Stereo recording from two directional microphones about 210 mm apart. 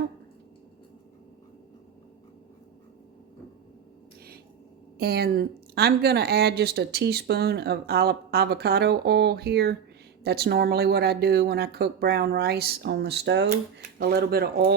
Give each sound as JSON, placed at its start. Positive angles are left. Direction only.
{"t": 4.9, "sound": "a woman's voice", "side_deg": -50}